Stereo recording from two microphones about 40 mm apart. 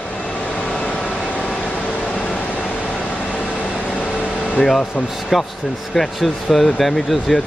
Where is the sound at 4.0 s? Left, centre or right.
Left.